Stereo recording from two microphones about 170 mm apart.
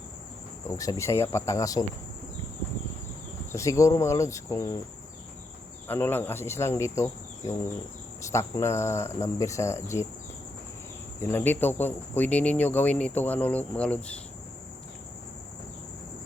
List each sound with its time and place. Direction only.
0.7 s speech: 20° left (ahead or behind)
3.5 s speech: 20° left (ahead or behind)
5.9 s speech: 10° left (ahead or behind)
11.2 s speech: 15° left (ahead or behind)